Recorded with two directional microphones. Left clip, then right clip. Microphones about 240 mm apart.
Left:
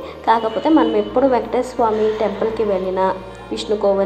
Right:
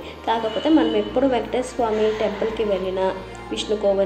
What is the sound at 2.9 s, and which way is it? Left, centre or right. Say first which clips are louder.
Speech: left 4 dB; centre.